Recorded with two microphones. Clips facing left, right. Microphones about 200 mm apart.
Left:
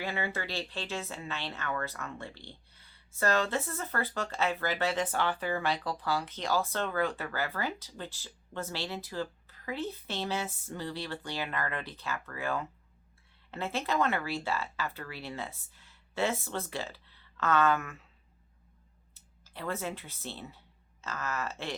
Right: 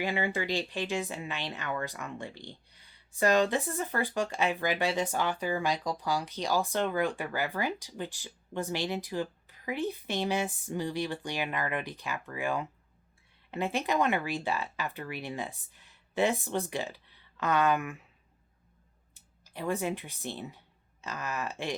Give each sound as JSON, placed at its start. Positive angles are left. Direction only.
{"t": 0.0, "sound": "speech", "side_deg": -15}
{"t": 19.1, "sound": "speech", "side_deg": -15}